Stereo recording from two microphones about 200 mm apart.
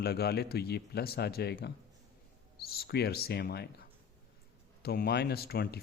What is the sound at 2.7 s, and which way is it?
Speech, 50° left (ahead or behind).